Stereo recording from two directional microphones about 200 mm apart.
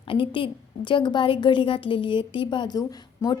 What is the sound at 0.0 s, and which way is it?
A woman's voice, 25° left (ahead or behind).